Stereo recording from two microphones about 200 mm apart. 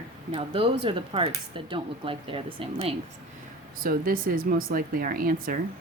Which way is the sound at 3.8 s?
45° right (ahead or behind).